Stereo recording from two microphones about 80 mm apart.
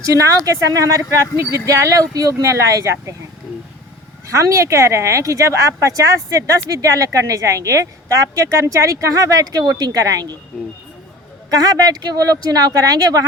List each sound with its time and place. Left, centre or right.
0.0 s speech: right
2.8 s speech: right
4.3 s speech: right
11.5 s speech: right